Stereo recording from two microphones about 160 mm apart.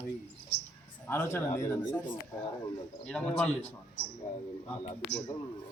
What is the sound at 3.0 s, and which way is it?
Speech, 5° left (ahead or behind).